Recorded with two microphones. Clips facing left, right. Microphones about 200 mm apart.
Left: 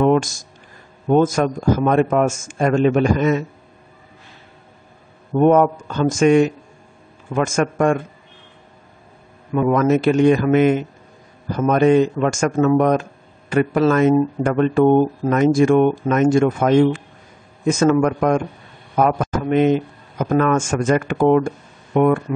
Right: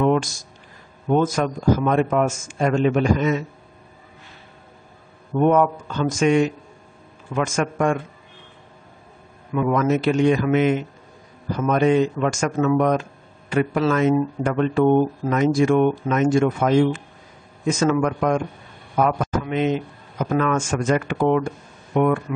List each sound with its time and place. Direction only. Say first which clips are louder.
0.0 s speech: left 3 dB; 45° left (ahead or behind)
5.3 s speech: left 4 dB; 45° left (ahead or behind)
9.5 s speech: left 4 dB; 45° left (ahead or behind)
19.4 s speech: left 9 dB; 50° left (ahead or behind)